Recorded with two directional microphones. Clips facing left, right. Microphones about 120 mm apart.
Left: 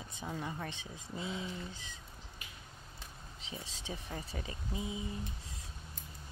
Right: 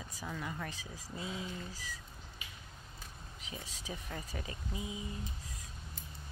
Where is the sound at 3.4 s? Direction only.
30° left (ahead or behind).